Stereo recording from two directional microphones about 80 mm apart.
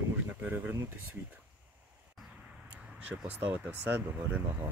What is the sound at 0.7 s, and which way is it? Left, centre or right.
Speech, right.